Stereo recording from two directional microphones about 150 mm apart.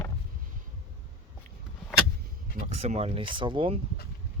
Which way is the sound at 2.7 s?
45° right (ahead or behind).